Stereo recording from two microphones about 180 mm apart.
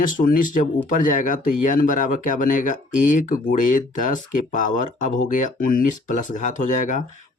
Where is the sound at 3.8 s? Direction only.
45° left (ahead or behind).